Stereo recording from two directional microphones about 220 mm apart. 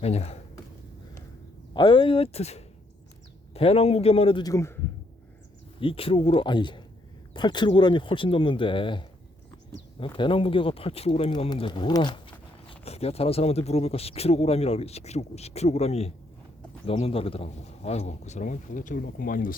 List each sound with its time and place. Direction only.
0.0 s speech: 30° left (ahead or behind)
1.7 s speech: 20° left (ahead or behind)
5.8 s a man's voice: 25° left (ahead or behind)